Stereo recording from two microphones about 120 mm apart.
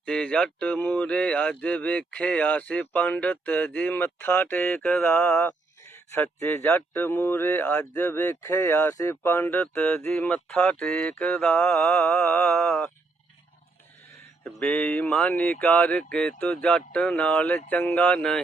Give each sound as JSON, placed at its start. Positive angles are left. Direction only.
{"t": 0.0, "sound": "speech", "side_deg": 10}
{"t": 11.3, "sound": "mantra", "side_deg": 10}
{"t": 14.4, "sound": "speech", "side_deg": 15}